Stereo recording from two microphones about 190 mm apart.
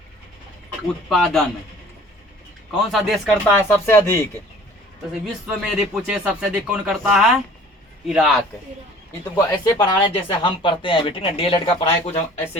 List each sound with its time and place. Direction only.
1.1 s speech: centre (ahead or behind)
2.7 s speech: centre (ahead or behind)
3.6 s speech: 15° left (ahead or behind)
5.2 s speech: centre (ahead or behind)
9.3 s speech: 20° left (ahead or behind)